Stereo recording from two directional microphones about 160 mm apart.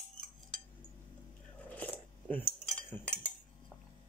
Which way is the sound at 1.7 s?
10° left (ahead or behind).